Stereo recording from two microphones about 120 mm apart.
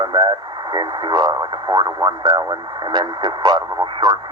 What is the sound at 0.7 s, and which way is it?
Speech, 40° right (ahead or behind).